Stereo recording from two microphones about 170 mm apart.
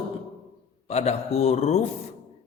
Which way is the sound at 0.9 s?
40° left (ahead or behind).